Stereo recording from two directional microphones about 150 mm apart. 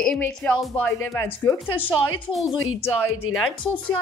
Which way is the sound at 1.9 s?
5° right (ahead or behind).